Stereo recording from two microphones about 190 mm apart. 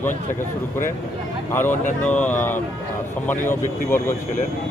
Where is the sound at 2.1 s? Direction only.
10° left (ahead or behind).